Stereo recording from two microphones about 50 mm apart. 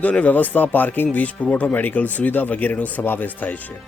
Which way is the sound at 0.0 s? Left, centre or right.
Left.